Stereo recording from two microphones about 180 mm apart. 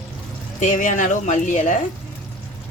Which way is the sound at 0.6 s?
45° left (ahead or behind).